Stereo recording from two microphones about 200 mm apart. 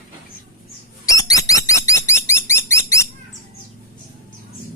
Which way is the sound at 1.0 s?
15° left (ahead or behind).